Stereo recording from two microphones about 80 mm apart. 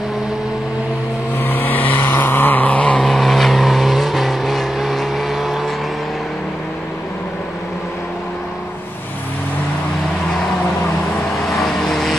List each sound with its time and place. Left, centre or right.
1.4 s vehicle: left
3.1 s vehicle: centre
11.4 s vehicle: centre